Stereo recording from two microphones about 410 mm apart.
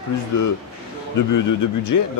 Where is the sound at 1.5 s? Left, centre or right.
Left.